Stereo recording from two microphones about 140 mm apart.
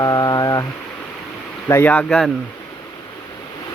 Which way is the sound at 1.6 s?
15° left (ahead or behind).